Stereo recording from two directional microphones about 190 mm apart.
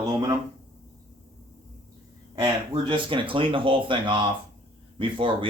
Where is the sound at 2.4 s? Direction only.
25° right (ahead or behind).